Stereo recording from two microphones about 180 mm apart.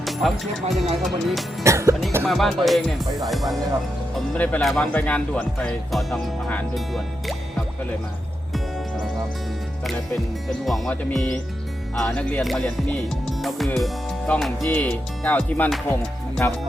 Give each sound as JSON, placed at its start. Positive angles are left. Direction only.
{"t": 0.0, "sound": "speech", "side_deg": 0}
{"t": 1.0, "sound": "music", "side_deg": 0}
{"t": 1.6, "sound": "music", "side_deg": -15}
{"t": 2.2, "sound": "music", "side_deg": 0}
{"t": 4.1, "sound": "speech", "side_deg": 5}
{"t": 10.7, "sound": "music", "side_deg": 5}
{"t": 13.2, "sound": "speech", "side_deg": 0}